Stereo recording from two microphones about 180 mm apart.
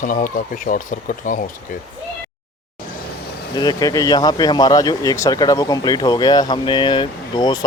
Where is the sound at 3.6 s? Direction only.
20° left (ahead or behind).